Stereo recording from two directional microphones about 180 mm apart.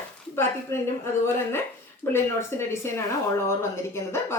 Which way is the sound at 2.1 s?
15° left (ahead or behind).